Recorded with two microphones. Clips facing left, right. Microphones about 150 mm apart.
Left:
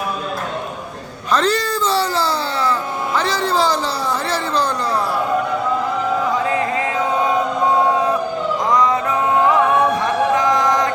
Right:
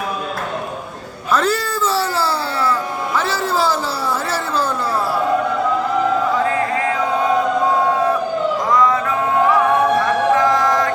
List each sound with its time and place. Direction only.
1.3 s speech: 5° right (ahead or behind)
8.7 s music: 20° left (ahead or behind)
10.3 s chant: 20° left (ahead or behind)